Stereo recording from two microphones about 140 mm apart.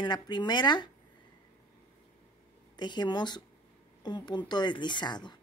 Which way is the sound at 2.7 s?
30° left (ahead or behind).